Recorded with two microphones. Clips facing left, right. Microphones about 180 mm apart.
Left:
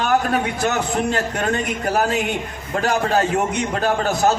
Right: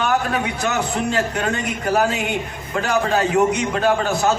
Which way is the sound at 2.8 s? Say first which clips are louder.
Left 1 dB; 40° left (ahead or behind).